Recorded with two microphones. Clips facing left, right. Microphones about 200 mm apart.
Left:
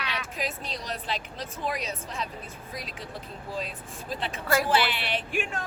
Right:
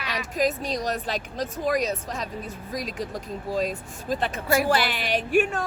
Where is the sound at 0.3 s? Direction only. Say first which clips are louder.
Right 13 dB; 45° right (ahead or behind).